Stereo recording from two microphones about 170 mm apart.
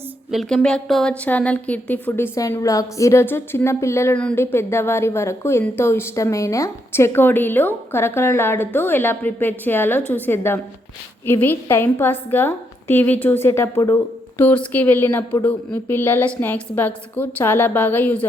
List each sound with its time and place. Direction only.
0.3 s a woman's voice: centre (ahead or behind)